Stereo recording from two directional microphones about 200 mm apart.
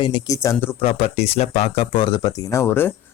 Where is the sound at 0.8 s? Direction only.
30° left (ahead or behind).